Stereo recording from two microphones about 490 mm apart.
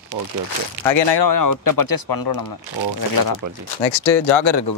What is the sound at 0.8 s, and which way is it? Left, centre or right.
Speech, left.